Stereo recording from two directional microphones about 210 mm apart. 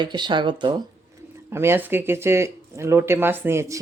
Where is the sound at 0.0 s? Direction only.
20° right (ahead or behind).